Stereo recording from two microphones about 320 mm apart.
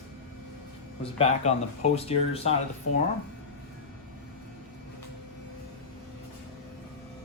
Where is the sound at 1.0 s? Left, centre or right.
Centre.